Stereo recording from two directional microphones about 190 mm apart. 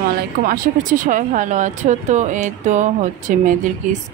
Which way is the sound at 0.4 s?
45° right (ahead or behind).